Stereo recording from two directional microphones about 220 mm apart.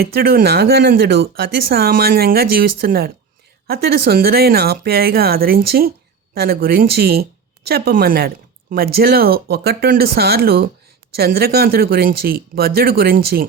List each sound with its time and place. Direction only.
0.0 s speech: 45° right (ahead or behind)